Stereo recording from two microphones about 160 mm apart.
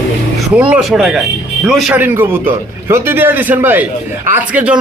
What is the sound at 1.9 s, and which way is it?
Speech, 10° right (ahead or behind).